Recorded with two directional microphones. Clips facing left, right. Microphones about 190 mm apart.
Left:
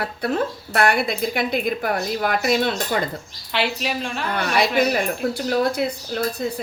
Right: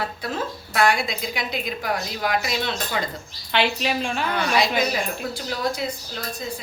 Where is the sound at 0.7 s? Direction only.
60° left (ahead or behind).